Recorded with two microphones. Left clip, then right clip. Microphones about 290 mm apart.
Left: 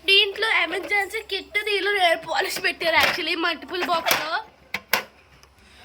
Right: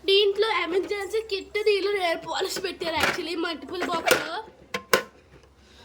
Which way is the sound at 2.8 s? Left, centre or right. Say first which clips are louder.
Left 5 dB; centre.